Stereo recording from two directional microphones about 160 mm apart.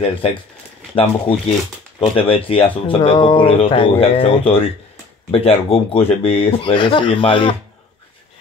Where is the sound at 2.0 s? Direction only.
35° left (ahead or behind).